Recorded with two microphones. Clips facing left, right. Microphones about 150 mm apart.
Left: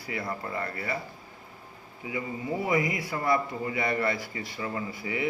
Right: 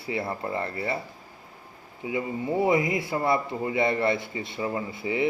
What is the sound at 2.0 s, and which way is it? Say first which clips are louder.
Speech: right 4 dB; 25° right (ahead or behind).